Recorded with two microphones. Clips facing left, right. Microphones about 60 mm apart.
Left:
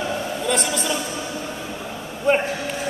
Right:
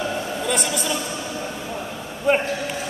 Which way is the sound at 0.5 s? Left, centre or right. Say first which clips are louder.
Left 2 dB; centre.